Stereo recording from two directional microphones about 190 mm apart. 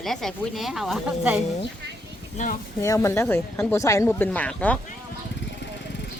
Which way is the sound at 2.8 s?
15° left (ahead or behind).